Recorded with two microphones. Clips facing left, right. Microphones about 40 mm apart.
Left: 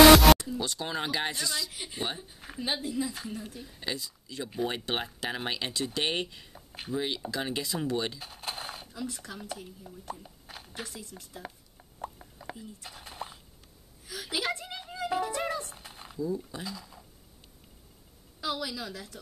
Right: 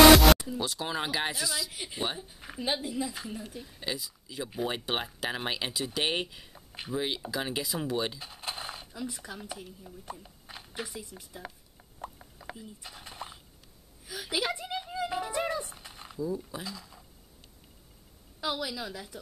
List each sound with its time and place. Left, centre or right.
0.1 s music: centre
0.4 s speech: centre
12.0 s plop: centre
14.0 s music: centre
18.4 s speech: centre